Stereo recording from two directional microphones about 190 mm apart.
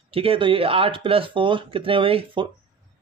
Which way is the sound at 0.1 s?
30° right (ahead or behind).